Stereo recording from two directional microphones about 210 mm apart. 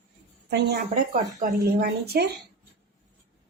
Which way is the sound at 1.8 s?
50° right (ahead or behind).